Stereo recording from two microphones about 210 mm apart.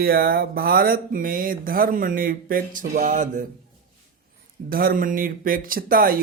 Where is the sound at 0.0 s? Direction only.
45° right (ahead or behind).